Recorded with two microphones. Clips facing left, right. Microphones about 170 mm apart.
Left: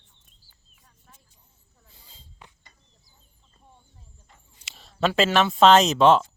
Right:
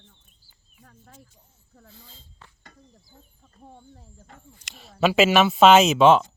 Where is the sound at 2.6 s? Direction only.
60° right (ahead or behind).